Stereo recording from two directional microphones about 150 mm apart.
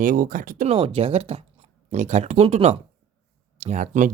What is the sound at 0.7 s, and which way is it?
Speech, 40° right (ahead or behind).